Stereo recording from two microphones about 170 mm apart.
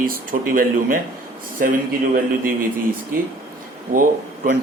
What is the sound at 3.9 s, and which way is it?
Speech, 55° right (ahead or behind).